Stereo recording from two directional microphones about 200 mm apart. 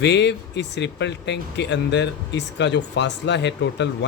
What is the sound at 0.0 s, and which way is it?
Speech, 60° left (ahead or behind).